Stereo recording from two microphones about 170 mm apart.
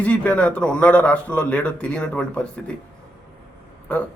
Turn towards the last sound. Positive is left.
turn(degrees=5)  # may be behind; listen again after turning